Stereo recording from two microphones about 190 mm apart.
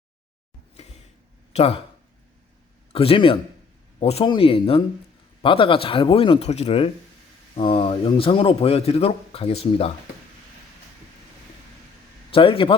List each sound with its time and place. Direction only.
1.5 s speech: 30° left (ahead or behind)
2.9 s a man's voice: 30° left (ahead or behind)
12.3 s a man's voice: 30° left (ahead or behind)